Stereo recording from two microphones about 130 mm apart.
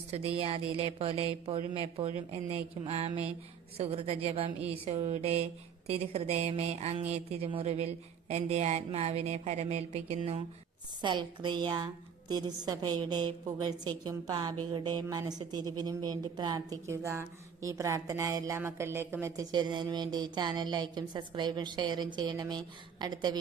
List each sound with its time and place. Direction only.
0.1 s speech: 50° right (ahead or behind)
11.0 s a woman's voice: 35° right (ahead or behind); by 19.5 s 20° right (ahead or behind)
19.5 s a woman's voice: 35° right (ahead or behind)